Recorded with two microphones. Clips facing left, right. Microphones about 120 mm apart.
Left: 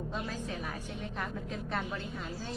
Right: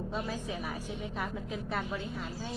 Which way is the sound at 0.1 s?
5° right (ahead or behind).